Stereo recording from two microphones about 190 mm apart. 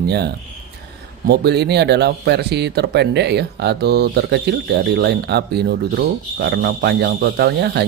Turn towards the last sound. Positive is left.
turn(degrees=-60)  # may be behind; listen again after turning